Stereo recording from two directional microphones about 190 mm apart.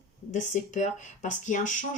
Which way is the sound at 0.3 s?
40° left (ahead or behind).